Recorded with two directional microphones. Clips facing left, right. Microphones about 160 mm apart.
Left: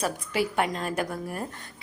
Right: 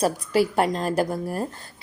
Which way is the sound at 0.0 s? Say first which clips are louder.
Right 6 dB; 35° right (ahead or behind).